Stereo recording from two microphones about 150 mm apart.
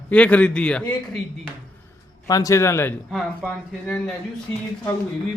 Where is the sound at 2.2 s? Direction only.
25° left (ahead or behind).